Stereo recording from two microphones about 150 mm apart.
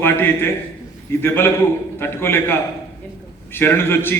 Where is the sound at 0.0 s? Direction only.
15° left (ahead or behind).